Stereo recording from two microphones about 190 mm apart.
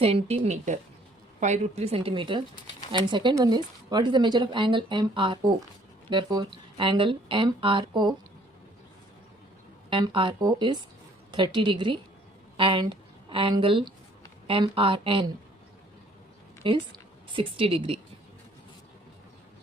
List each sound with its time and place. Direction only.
0.0 s a woman's voice: 30° right (ahead or behind)
9.9 s a woman's voice: 25° right (ahead or behind)
16.6 s a woman's voice: 25° right (ahead or behind)